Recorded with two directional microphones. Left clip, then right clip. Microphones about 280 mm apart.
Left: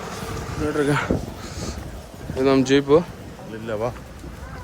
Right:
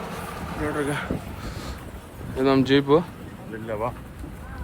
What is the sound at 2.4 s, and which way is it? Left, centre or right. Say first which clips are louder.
Speech: left 2 dB; centre.